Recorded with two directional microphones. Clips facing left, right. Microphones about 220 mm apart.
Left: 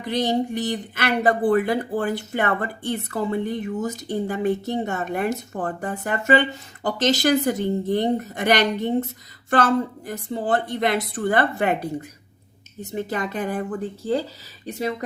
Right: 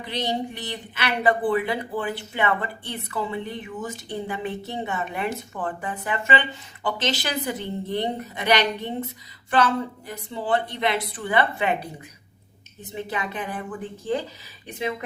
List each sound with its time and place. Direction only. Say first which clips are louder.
0.0 s speech: left 5 dB; 45° left (ahead or behind)
12.8 s speech: left 4 dB; 40° left (ahead or behind)